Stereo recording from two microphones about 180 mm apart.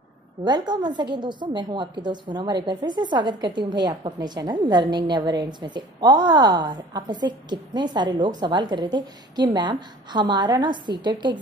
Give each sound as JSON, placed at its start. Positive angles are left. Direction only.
{"t": 0.4, "sound": "a woman's voice", "side_deg": -25}